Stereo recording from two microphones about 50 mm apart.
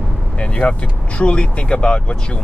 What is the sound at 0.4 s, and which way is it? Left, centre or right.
Speech, left.